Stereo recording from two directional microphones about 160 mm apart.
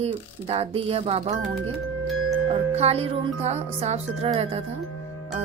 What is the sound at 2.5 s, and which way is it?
Speech, 40° right (ahead or behind).